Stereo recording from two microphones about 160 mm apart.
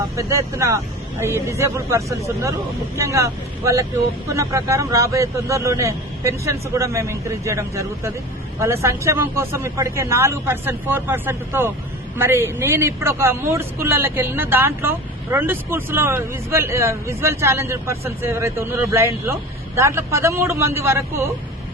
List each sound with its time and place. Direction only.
0.2 s speech: 20° right (ahead or behind)